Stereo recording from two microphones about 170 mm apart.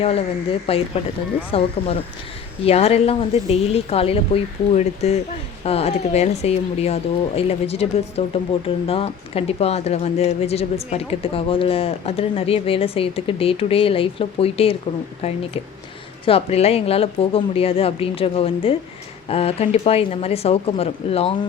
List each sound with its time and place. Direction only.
0.0 s speech: 35° left (ahead or behind)
16.2 s speech: 35° left (ahead or behind)